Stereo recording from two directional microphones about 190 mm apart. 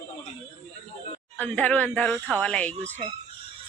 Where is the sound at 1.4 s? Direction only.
5° left (ahead or behind).